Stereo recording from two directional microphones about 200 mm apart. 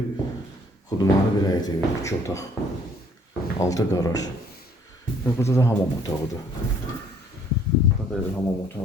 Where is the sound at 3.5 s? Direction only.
15° left (ahead or behind).